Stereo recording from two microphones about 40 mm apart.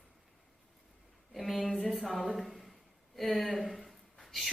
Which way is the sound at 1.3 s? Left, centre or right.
Centre.